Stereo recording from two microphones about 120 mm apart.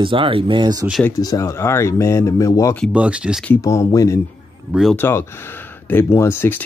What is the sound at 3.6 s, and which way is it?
Speech, 25° left (ahead or behind).